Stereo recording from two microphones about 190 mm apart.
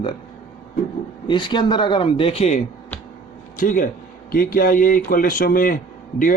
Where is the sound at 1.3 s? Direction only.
25° left (ahead or behind).